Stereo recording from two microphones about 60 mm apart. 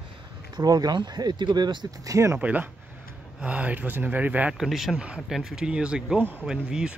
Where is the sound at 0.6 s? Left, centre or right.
Right.